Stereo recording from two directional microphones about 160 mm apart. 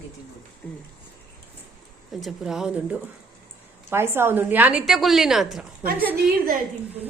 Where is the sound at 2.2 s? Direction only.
5° right (ahead or behind).